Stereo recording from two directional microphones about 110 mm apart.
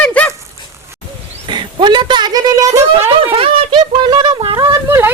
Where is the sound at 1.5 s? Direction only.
45° right (ahead or behind).